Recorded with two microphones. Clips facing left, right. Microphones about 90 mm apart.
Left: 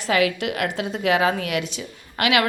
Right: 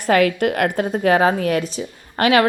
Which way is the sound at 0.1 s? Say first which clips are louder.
Right 5 dB; 45° right (ahead or behind).